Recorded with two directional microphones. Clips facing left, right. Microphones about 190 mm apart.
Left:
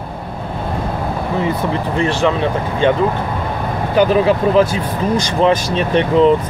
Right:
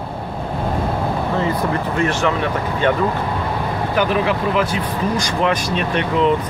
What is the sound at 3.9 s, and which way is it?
Speech, 35° left (ahead or behind).